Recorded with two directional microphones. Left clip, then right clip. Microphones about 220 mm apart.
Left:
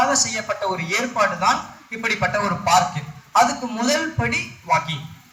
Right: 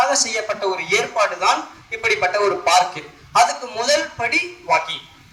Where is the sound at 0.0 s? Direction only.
40° left (ahead or behind).